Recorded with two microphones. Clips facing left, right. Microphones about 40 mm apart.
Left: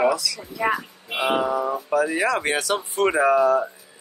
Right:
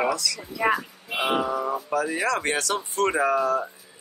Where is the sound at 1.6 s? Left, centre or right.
Centre.